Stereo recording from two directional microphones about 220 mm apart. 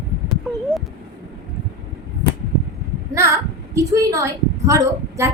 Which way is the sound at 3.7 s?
15° right (ahead or behind).